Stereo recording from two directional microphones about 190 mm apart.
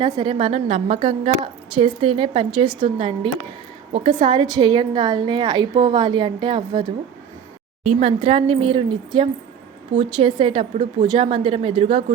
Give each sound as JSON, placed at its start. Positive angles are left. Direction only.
{"t": 0.0, "sound": "a woman's voice", "side_deg": -25}
{"t": 7.9, "sound": "a woman's voice", "side_deg": -35}